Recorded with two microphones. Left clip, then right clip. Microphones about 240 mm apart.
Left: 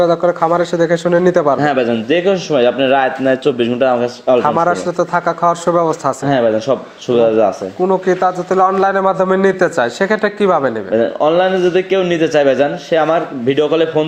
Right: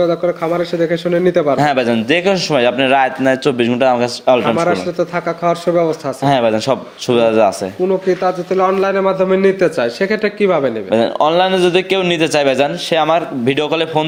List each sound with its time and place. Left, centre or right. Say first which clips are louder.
0.0 s a man's voice: left 3 dB; centre
1.5 s a man's voice: even; right
4.6 s a man's voice: left 1 dB; centre
6.2 s a man's voice: right 1 dB; right
7.9 s a man's voice: left 2 dB; centre
10.9 s a man's voice: even; right